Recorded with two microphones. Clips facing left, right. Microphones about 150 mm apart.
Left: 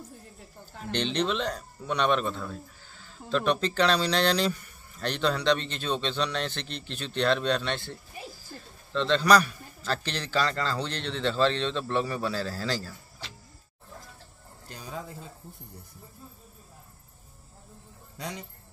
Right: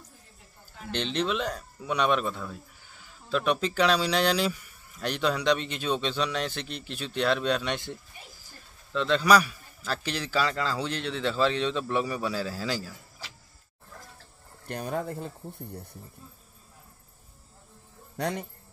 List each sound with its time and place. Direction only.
0.9 s speech: 5° right (ahead or behind)
14.7 s speech: 60° right (ahead or behind)
18.1 s speech: 60° right (ahead or behind)